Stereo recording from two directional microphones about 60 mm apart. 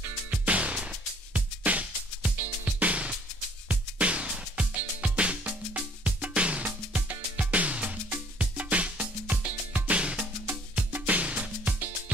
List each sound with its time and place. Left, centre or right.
0.5 s music: right